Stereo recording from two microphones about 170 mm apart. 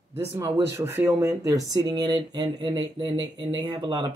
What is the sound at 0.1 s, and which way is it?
Speech, 15° right (ahead or behind).